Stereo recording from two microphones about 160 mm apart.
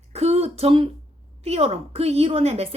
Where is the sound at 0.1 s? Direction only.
40° right (ahead or behind).